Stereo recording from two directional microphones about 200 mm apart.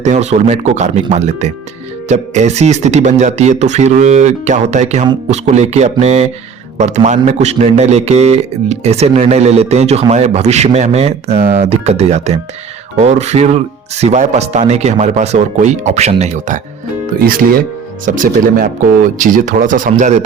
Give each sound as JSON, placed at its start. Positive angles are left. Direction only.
{"t": 0.0, "sound": "a man's voice", "side_deg": -35}
{"t": 17.2, "sound": "a man's voice", "side_deg": -45}